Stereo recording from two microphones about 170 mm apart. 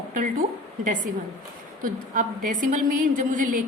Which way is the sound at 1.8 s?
55° right (ahead or behind).